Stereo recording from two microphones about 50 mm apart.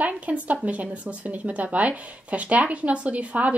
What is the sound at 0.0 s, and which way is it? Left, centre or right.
Speech, right.